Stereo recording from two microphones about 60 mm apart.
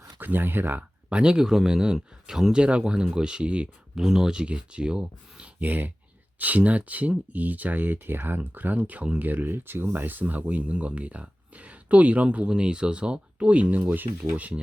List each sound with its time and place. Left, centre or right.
0.2 s speech: right
1.1 s speech: centre
3.9 s speech: centre
5.5 s speech: right